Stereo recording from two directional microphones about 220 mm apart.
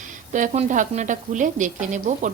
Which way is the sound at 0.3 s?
35° right (ahead or behind).